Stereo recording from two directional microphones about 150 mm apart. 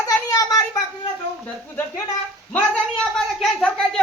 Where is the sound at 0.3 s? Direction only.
20° left (ahead or behind).